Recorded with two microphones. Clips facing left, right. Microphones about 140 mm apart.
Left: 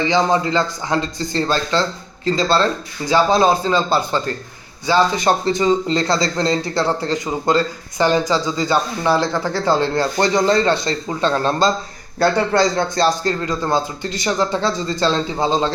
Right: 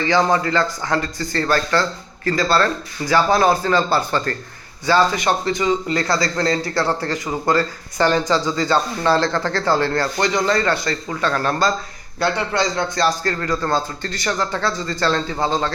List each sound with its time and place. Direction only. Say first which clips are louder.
0.0 s speech: left 1 dB; 15° left (ahead or behind)
5.1 s speech: left 3 dB; 30° left (ahead or behind)
10.2 s speech: left 5 dB; 30° left (ahead or behind)
12.2 s speech: left 5 dB; 35° left (ahead or behind); by 15.7 s 20° left (ahead or behind)